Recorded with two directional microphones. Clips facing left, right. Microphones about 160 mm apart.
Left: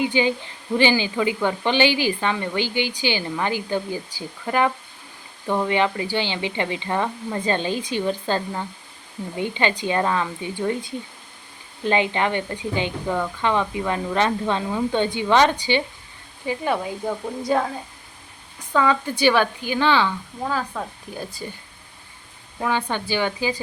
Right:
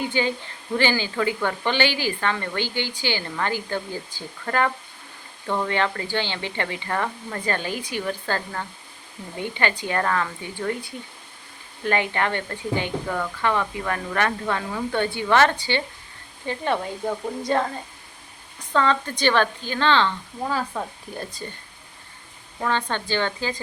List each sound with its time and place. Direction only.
0.0 s speech: 15° left (ahead or behind)
20.4 s speech: centre (ahead or behind)
22.5 s speech: 10° left (ahead or behind)